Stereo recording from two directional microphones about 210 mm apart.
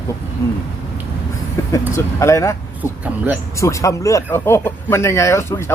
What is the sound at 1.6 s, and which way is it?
Vehicle, 10° left (ahead or behind).